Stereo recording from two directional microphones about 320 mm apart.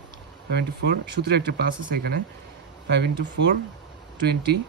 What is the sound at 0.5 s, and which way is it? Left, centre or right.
Speech, right.